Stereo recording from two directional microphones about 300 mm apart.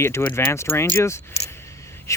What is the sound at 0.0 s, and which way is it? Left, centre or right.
Speech, centre.